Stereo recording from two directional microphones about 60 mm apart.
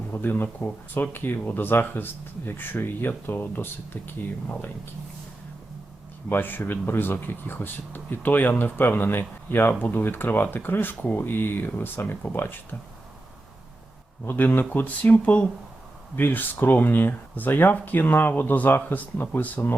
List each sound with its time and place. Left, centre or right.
0.1 s speech: left
6.2 s speech: left
14.3 s speech: left